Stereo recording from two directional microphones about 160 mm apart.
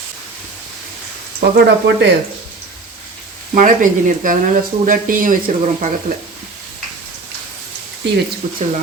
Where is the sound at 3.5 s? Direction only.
55° right (ahead or behind).